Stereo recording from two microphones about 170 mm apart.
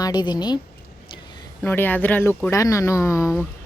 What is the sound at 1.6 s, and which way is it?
Speech, 10° left (ahead or behind).